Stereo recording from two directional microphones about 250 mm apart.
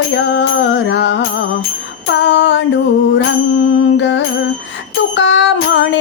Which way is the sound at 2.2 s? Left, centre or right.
Left.